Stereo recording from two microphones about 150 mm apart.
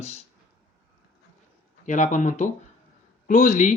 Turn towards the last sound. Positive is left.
turn(degrees=60)  # may be behind; listen again after turning